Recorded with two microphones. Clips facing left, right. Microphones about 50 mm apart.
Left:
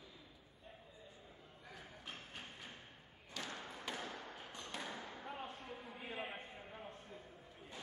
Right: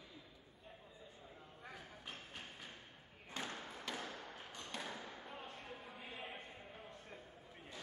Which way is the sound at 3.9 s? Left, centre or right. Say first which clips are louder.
Even; centre.